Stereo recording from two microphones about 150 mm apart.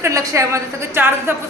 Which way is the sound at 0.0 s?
20° right (ahead or behind).